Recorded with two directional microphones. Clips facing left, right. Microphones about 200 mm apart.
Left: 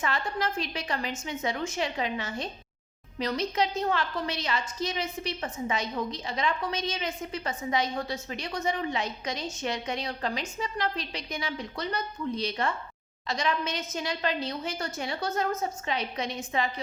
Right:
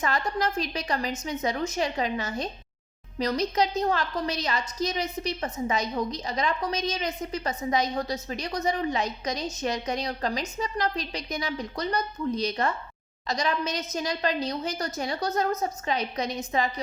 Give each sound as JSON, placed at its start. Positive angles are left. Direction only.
{"t": 0.0, "sound": "a woman's voice", "side_deg": -40}